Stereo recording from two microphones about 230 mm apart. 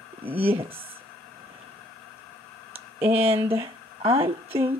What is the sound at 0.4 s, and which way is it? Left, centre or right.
Speech, right.